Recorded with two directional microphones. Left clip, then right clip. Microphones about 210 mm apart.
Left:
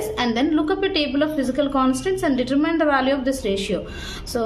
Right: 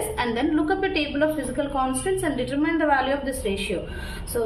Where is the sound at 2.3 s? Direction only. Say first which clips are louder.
Left 4 dB; 35° left (ahead or behind).